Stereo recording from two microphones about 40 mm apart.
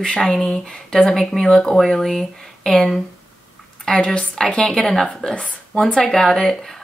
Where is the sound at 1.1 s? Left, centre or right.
Centre.